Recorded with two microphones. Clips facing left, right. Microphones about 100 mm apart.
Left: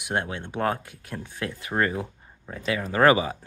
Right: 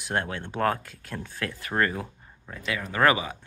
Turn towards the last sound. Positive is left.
turn(degrees=30)  # may be behind; listen again after turning